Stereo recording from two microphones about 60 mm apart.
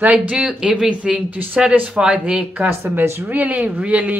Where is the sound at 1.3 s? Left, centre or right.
Right.